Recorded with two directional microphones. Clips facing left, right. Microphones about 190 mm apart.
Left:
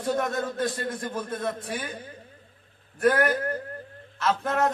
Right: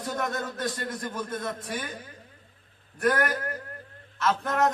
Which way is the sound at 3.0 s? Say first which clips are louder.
Left 3 dB; 30° left (ahead or behind).